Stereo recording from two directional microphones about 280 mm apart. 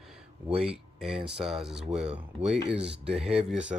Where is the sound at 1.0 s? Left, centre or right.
Centre.